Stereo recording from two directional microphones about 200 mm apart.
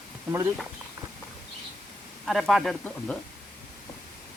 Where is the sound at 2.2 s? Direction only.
Centre (ahead or behind).